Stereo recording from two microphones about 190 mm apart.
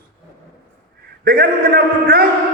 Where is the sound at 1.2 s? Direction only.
50° right (ahead or behind).